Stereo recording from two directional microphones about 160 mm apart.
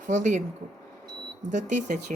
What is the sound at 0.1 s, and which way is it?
Speech, 50° right (ahead or behind).